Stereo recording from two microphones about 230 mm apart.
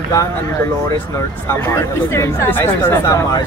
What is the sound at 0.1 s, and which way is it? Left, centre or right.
Speech, centre.